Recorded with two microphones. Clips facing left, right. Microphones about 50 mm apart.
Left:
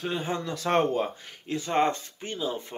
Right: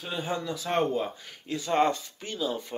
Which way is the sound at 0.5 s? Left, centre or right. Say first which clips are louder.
Left 4 dB; left.